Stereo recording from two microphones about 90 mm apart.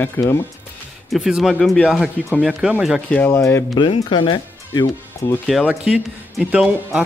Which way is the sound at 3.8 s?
65° left (ahead or behind).